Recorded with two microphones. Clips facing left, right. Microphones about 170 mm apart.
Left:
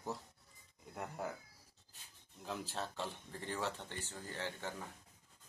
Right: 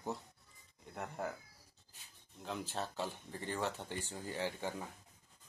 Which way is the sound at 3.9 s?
15° right (ahead or behind).